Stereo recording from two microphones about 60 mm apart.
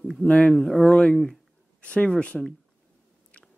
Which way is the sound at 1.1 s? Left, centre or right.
Centre.